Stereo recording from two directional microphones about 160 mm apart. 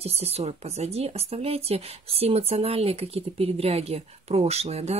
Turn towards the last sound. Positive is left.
turn(degrees=-40)  # may be behind; listen again after turning